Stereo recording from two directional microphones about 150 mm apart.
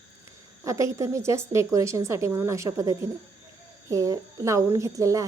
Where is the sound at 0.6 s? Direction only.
20° right (ahead or behind).